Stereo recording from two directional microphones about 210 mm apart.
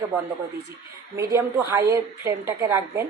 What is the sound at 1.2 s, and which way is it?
Speech, 15° right (ahead or behind).